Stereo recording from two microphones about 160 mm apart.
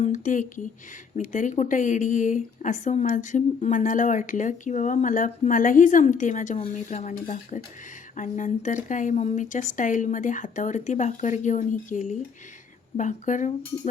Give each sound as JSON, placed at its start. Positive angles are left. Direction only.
{"t": 0.0, "sound": "speech", "side_deg": 55}